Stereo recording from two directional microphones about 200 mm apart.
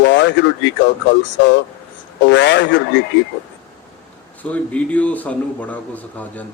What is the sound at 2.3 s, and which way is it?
Speech, 60° left (ahead or behind).